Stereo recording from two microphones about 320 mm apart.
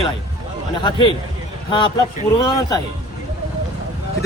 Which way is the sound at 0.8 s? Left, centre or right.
Centre.